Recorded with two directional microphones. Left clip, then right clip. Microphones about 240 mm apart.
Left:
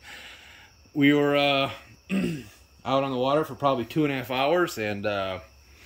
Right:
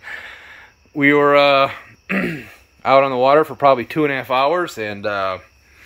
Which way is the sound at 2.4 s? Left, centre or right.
Right.